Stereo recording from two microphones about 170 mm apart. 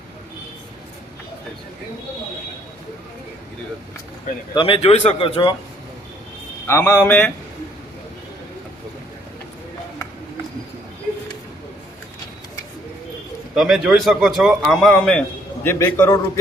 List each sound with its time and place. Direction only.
4.5 s a man's voice: 30° left (ahead or behind)
6.7 s a man's voice: 15° left (ahead or behind)
13.6 s a man's voice: centre (ahead or behind)
15.6 s a man's voice: 15° left (ahead or behind)